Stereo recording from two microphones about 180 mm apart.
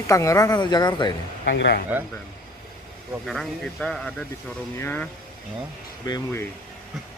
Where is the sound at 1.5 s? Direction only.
75° left (ahead or behind).